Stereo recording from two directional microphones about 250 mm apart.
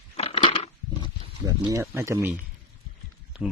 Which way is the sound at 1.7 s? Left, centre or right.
Centre.